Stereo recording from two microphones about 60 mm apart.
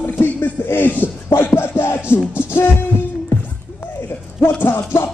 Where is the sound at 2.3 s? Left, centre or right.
Left.